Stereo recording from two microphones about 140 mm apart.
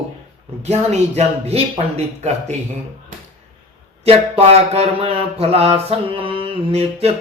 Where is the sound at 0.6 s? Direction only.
50° right (ahead or behind).